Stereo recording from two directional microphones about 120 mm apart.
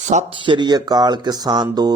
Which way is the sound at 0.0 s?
80° right.